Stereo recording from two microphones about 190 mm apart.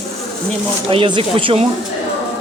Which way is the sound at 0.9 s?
25° right (ahead or behind).